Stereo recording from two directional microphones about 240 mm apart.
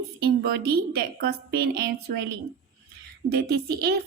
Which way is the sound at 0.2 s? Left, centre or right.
Right.